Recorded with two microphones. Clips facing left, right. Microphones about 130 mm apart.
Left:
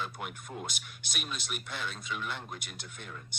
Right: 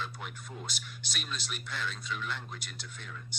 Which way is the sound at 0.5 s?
50° left (ahead or behind).